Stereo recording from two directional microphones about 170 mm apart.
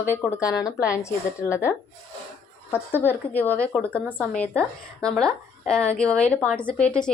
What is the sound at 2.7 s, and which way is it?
A woman's voice, 10° left (ahead or behind).